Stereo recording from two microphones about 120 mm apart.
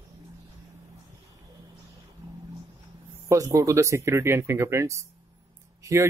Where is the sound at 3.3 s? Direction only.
25° right (ahead or behind).